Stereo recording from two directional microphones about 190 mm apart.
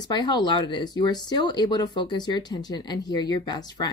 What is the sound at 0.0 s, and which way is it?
Speech, 20° left (ahead or behind).